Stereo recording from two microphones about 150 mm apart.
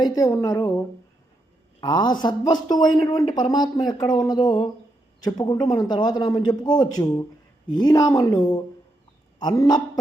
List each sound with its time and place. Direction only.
0.0 s a man's voice: 25° left (ahead or behind)
1.8 s a man's voice: 30° left (ahead or behind)